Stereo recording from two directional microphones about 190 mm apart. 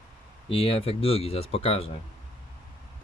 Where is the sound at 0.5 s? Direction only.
30° left (ahead or behind).